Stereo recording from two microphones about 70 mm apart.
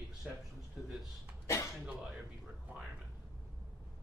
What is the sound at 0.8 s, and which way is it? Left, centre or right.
Speech, centre.